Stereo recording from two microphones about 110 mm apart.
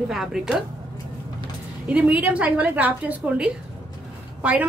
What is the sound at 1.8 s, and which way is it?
A woman's voice, 15° right (ahead or behind).